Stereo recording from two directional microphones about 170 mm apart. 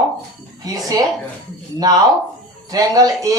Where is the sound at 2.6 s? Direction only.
20° right (ahead or behind).